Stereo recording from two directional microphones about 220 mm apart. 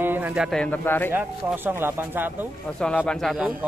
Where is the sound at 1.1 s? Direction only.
10° right (ahead or behind).